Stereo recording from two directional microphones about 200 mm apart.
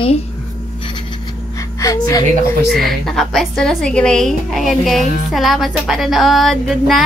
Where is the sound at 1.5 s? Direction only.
15° left (ahead or behind).